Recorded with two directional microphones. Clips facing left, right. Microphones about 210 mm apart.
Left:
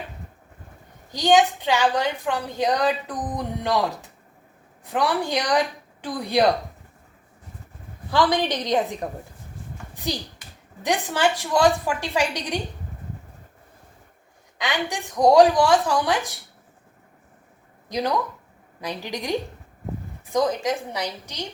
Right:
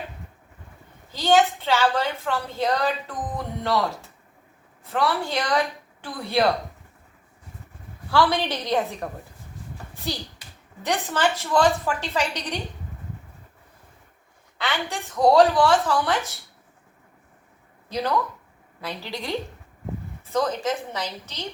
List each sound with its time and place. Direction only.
1.1 s a woman's voice: 15° left (ahead or behind)
8.1 s a woman's voice: 15° left (ahead or behind)
9.9 s a sound: 15° left (ahead or behind)
10.8 s a woman's voice: 15° left (ahead or behind)
14.6 s a woman's voice: 15° left (ahead or behind)
17.8 s a woman's voice: 15° left (ahead or behind)